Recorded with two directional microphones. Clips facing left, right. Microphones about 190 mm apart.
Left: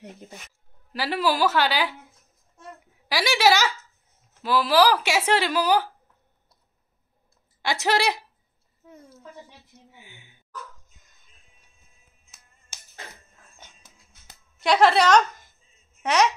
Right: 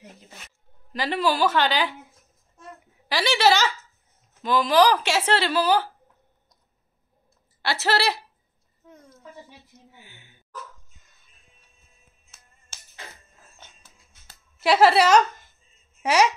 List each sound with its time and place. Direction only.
0.9 s speech: 10° left (ahead or behind)
3.1 s speech: 10° left (ahead or behind)
7.6 s speech: 15° left (ahead or behind)
8.8 s a sound: 5° left (ahead or behind)
9.9 s speech: 15° left (ahead or behind)
12.3 s finger snapping: 15° left (ahead or behind)
13.6 s music: 15° left (ahead or behind)
14.6 s a woman's voice: 5° right (ahead or behind)